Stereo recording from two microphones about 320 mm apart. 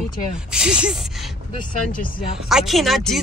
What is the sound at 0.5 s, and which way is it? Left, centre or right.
Speech, centre.